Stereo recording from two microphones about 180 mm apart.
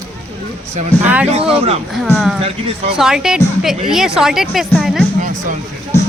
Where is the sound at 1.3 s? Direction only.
35° right (ahead or behind).